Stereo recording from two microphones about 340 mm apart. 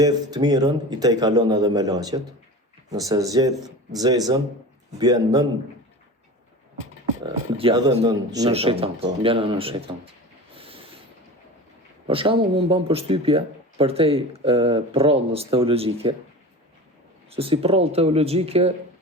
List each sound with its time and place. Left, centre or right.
0.0 s speech: centre
7.5 s speech: centre
10.5 s a sound: centre
12.0 s speech: centre
17.3 s speech: centre